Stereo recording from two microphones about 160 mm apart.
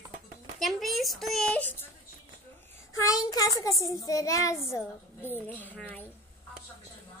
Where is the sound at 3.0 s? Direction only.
20° left (ahead or behind).